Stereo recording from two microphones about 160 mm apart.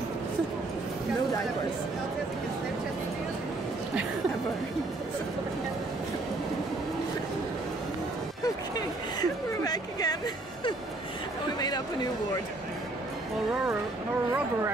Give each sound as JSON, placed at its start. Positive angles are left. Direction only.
{"t": 8.7, "sound": "speech", "side_deg": 25}